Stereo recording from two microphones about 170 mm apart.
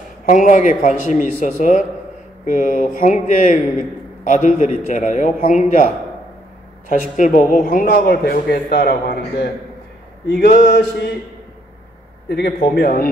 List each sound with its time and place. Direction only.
0.3 s a man's voice: 50° left (ahead or behind)
6.9 s a man's voice: 50° left (ahead or behind); by 9.5 s 65° left (ahead or behind)
10.6 s mantra: 80° left
12.3 s a man's voice: 70° left (ahead or behind)